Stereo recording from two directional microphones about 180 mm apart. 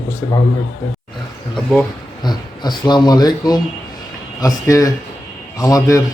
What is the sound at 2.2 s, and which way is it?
A man's voice, 25° left (ahead or behind).